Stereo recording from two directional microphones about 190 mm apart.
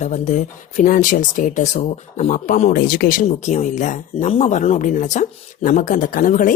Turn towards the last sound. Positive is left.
turn(degrees=45)  # may be behind; listen again after turning